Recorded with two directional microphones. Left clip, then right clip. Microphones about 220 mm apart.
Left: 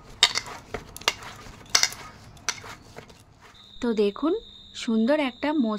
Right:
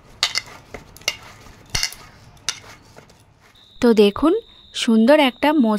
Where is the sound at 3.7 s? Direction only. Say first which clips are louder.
Right 10 dB; 45° right (ahead or behind).